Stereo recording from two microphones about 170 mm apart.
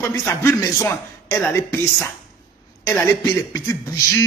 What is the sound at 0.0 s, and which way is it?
A man's voice, 15° left (ahead or behind).